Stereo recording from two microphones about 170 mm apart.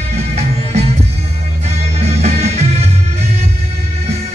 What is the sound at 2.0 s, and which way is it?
Music, 40° right (ahead or behind).